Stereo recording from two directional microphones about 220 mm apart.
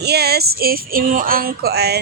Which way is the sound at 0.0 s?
45° right (ahead or behind).